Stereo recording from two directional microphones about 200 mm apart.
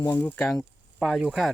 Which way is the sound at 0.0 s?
10° left (ahead or behind).